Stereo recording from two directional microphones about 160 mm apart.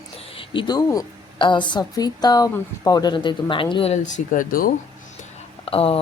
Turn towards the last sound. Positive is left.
turn(degrees=35)  # may be behind; listen again after turning